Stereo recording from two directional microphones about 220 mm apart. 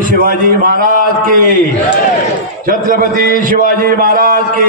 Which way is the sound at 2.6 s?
40° right (ahead or behind).